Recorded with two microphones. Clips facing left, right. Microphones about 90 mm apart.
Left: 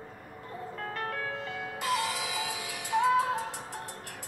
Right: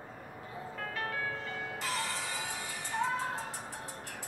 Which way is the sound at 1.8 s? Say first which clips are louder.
Left 8 dB; 65° left (ahead or behind).